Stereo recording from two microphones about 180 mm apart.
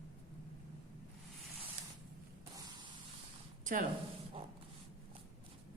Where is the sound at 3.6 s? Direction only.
45° right (ahead or behind).